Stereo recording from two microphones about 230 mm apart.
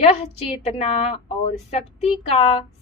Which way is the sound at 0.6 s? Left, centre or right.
Left.